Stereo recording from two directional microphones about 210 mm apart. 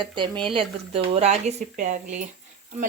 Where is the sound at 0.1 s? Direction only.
25° right (ahead or behind).